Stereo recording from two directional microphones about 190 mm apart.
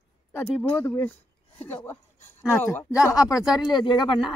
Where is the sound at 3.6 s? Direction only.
25° left (ahead or behind).